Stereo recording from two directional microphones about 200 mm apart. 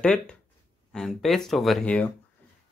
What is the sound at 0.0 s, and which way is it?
Speech, 5° left (ahead or behind).